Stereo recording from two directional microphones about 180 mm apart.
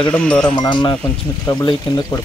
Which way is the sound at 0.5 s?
25° left (ahead or behind).